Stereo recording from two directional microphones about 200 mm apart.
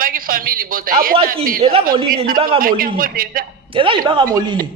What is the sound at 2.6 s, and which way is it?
Speech, 45° right (ahead or behind).